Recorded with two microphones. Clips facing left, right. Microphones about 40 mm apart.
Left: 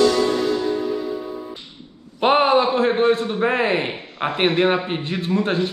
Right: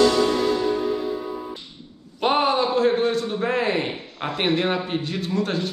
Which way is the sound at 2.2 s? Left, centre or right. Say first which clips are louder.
Left 4 dB; left.